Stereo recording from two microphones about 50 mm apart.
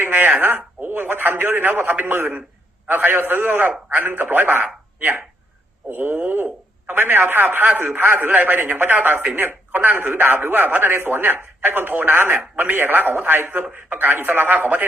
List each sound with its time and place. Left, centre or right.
0.0 s speech: right
5.9 s speech: right